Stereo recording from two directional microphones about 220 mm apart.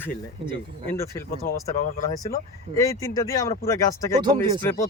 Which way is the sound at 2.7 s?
15° left (ahead or behind).